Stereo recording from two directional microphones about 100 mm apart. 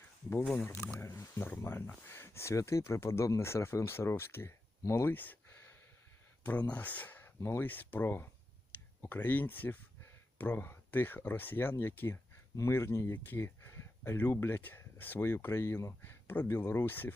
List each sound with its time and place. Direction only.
0.5 s speech: 20° left (ahead or behind)
6.4 s speech: 15° left (ahead or behind)